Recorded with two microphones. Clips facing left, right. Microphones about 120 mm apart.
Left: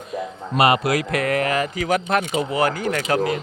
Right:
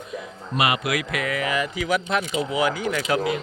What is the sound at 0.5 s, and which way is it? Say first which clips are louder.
Speech: left 5 dB; 35° left (ahead or behind).